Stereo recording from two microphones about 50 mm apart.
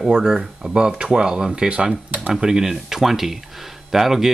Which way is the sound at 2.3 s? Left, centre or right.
Centre.